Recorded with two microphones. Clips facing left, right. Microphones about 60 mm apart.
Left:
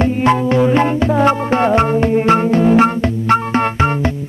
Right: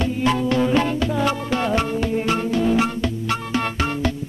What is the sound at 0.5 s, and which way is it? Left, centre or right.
Music, left.